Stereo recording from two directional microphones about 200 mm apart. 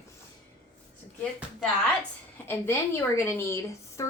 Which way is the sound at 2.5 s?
10° left (ahead or behind).